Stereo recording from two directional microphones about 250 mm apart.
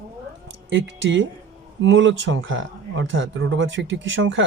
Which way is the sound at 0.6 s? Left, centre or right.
Right.